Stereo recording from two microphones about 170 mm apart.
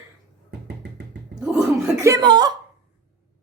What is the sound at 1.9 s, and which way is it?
Speech, 20° right (ahead or behind).